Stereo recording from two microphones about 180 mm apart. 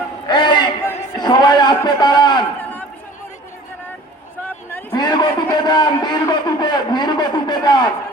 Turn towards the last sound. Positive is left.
turn(degrees=25)  # may be behind; listen again after turning